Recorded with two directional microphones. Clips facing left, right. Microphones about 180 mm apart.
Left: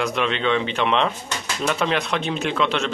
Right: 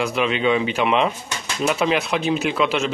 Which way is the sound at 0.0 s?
5° right (ahead or behind).